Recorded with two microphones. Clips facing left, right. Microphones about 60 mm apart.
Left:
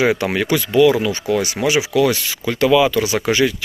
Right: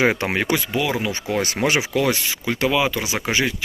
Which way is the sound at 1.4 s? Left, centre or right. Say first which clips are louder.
Left 3 dB; right.